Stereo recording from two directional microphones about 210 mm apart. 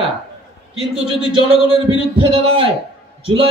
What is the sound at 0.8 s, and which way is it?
A man's voice, 25° right (ahead or behind).